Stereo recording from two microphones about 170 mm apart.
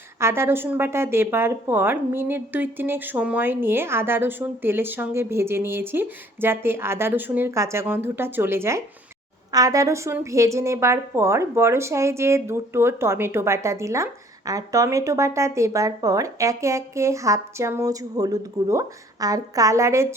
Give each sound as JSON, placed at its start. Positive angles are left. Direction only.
{"t": 0.2, "sound": "a woman's voice", "side_deg": -15}